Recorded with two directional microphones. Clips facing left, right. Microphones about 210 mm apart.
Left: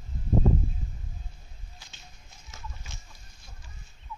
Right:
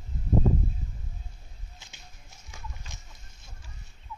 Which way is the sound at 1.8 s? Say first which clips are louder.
Right 1 dB; 20° right (ahead or behind).